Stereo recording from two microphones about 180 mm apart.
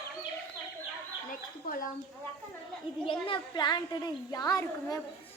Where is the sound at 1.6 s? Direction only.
50° left (ahead or behind).